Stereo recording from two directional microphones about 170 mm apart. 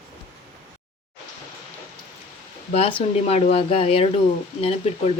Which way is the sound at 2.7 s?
35° left (ahead or behind).